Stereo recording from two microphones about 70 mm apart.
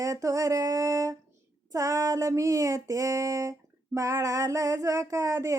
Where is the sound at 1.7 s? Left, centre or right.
Right.